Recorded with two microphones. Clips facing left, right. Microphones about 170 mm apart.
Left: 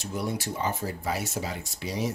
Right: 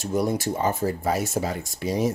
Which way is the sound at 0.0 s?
45° right (ahead or behind).